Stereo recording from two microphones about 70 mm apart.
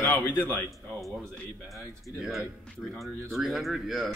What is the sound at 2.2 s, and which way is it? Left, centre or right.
Speech, centre.